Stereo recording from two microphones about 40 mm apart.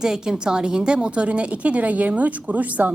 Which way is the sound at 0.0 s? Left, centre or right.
Centre.